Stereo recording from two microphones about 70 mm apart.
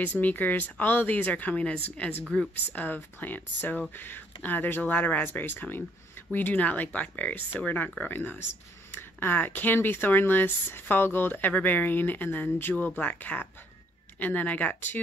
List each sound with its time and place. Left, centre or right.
0.0 s a woman's voice: left